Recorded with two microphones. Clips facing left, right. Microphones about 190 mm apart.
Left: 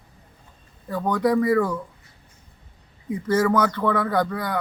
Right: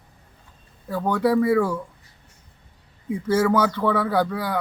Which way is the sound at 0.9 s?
5° right (ahead or behind).